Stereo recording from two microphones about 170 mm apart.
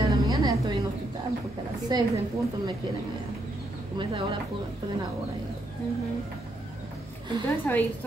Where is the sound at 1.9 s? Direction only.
25° right (ahead or behind).